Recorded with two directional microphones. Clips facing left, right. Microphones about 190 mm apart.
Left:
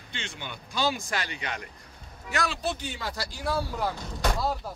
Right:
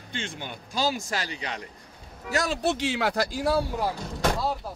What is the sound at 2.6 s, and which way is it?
Speech, 80° right.